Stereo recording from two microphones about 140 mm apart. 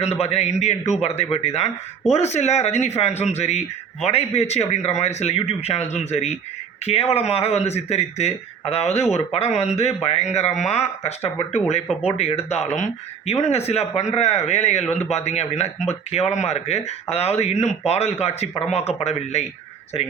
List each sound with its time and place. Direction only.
0.0 s a man's voice: 45° left (ahead or behind)
10.5 s speech: centre (ahead or behind)
12.0 s a man's voice: 45° left (ahead or behind)